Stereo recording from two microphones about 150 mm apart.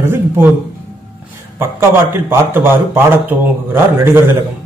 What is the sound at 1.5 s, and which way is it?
A man's voice, 15° right (ahead or behind).